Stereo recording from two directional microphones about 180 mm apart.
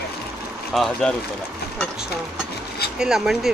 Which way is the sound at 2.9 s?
5° right (ahead or behind).